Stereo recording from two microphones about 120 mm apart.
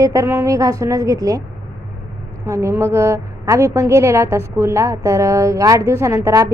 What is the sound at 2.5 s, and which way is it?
A woman's voice, 25° right (ahead or behind).